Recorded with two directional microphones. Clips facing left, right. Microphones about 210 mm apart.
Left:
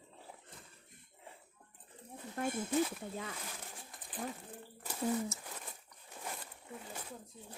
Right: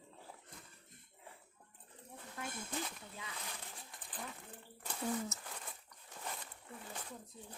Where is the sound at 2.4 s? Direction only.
50° left (ahead or behind).